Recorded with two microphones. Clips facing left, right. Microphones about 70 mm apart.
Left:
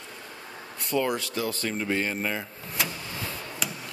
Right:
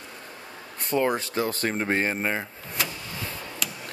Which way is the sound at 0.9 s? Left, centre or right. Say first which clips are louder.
Right 3 dB; right.